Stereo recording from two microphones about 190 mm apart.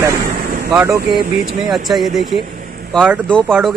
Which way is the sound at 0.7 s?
15° right (ahead or behind).